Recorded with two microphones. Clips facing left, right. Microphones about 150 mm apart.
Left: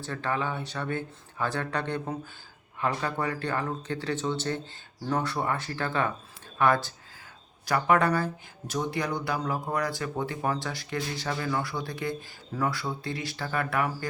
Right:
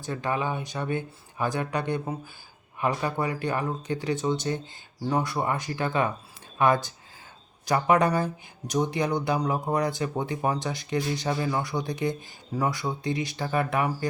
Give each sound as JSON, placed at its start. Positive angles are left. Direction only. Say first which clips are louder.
{"t": 0.0, "sound": "speech", "louder": "right 2 dB", "side_deg": -15}